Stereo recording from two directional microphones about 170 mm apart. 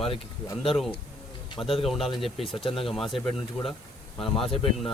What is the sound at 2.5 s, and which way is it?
Speech, 30° left (ahead or behind).